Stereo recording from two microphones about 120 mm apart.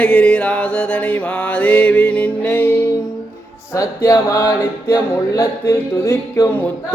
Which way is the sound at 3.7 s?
30° left (ahead or behind).